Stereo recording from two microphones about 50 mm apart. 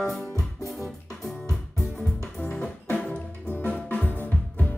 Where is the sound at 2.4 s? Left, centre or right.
Left.